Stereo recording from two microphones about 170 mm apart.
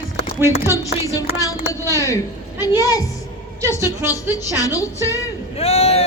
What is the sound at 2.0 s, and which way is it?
A woman's voice, 20° left (ahead or behind).